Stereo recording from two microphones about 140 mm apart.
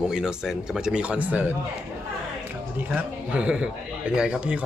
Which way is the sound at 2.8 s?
10° right (ahead or behind).